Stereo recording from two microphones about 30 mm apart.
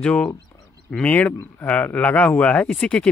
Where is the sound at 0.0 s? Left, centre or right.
Left.